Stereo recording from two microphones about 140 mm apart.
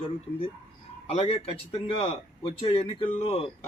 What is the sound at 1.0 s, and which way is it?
A man's voice, 45° left (ahead or behind).